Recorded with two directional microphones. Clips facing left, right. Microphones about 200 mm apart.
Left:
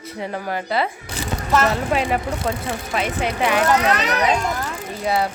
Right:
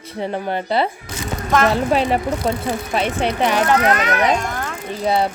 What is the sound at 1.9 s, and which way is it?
Speech, 30° right (ahead or behind).